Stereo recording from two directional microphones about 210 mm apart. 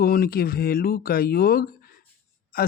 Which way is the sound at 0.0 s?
45° left (ahead or behind).